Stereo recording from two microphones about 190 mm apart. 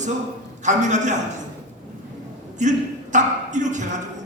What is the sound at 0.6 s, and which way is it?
Speech, 40° right (ahead or behind).